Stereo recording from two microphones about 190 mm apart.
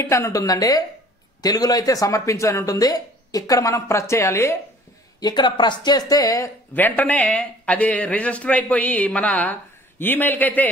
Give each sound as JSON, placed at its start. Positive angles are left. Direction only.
{"t": 0.0, "sound": "speech", "side_deg": 15}